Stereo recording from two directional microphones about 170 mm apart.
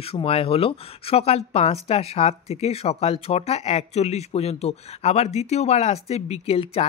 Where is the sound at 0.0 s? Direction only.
35° left (ahead or behind).